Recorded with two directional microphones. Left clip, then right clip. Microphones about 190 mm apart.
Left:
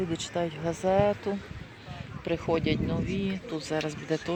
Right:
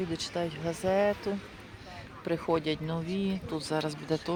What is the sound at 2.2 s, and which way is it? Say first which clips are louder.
Speech: left 1 dB; centre (ahead or behind).